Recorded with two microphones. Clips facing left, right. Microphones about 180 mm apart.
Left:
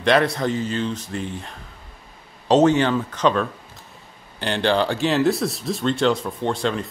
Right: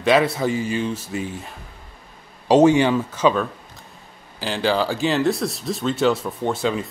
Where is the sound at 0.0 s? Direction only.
5° right (ahead or behind).